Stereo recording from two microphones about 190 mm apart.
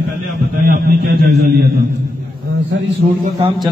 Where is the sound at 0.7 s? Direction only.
50° right (ahead or behind).